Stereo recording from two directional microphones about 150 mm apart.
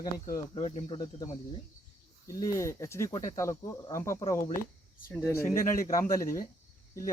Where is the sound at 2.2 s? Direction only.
20° left (ahead or behind).